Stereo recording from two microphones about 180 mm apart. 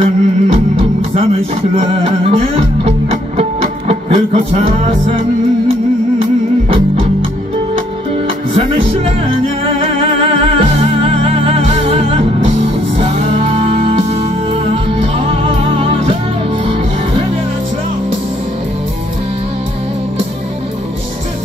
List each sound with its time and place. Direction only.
0.0 s music: 30° right (ahead or behind)
8.5 s music: 30° right (ahead or behind)